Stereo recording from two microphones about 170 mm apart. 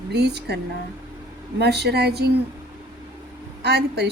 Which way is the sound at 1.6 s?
75° right (ahead or behind).